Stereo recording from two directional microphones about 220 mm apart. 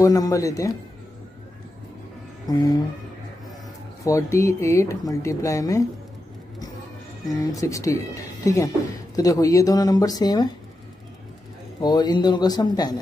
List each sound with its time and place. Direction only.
0.0 s speech: 15° left (ahead or behind)
2.4 s a sound: 15° left (ahead or behind)
4.0 s speech: 15° left (ahead or behind)
7.2 s speech: 15° left (ahead or behind)
9.1 s speech: 15° left (ahead or behind)
11.8 s speech: 20° left (ahead or behind)